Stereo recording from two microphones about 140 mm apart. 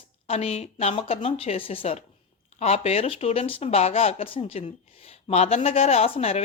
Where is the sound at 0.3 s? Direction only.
50° left (ahead or behind).